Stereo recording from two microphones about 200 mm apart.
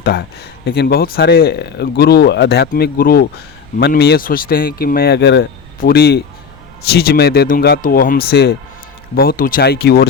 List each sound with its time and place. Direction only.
0.0 s speech: 55° left (ahead or behind)